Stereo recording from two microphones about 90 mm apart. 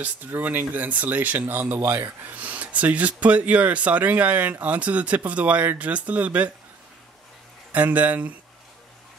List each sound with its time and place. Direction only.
0.0 s speech: 20° right (ahead or behind)
7.7 s speech: 15° right (ahead or behind)